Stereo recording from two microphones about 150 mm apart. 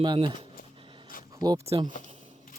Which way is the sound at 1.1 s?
70° left (ahead or behind).